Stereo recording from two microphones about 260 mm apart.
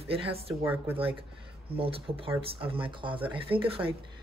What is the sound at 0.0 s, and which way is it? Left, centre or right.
Speech, right.